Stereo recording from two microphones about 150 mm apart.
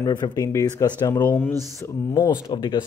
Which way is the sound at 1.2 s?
15° left (ahead or behind).